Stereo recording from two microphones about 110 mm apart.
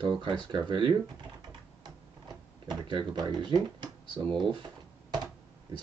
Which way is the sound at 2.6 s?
45° right (ahead or behind).